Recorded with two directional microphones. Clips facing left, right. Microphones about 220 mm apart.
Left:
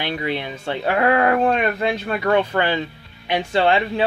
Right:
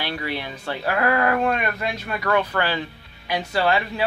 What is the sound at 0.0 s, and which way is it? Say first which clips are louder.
Speech: left 4 dB; 20° left (ahead or behind).